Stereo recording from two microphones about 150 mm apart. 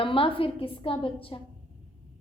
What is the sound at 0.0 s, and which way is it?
A woman's voice, 35° left (ahead or behind).